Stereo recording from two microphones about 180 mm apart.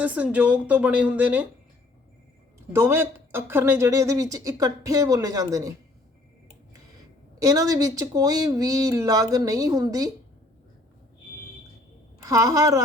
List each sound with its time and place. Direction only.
0.0 s speech: 10° right (ahead or behind)
2.7 s speech: 15° right (ahead or behind)
7.4 s speech: 20° right (ahead or behind)
12.2 s speech: 20° right (ahead or behind)